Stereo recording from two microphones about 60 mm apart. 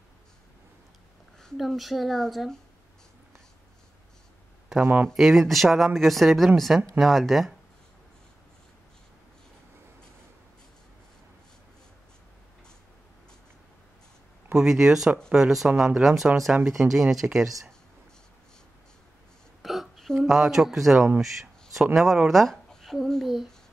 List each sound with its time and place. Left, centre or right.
1.6 s speech: centre
4.8 s speech: right
5.1 s speech: centre
14.5 s speech: centre
19.6 s speech: centre
21.9 s speech: centre
23.2 s speech: centre